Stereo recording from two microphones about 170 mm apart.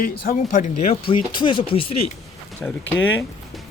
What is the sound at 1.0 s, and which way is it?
Speech, 30° left (ahead or behind).